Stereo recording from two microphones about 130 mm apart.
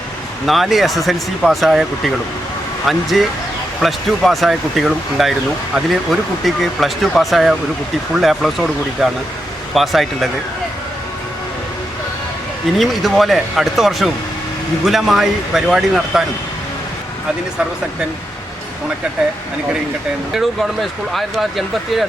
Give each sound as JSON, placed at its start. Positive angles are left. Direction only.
{"t": 0.4, "sound": "speech", "side_deg": 0}
{"t": 12.7, "sound": "speech", "side_deg": 0}
{"t": 21.1, "sound": "speech", "side_deg": 0}